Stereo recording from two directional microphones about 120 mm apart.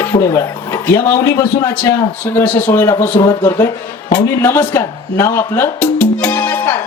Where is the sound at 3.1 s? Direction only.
35° left (ahead or behind).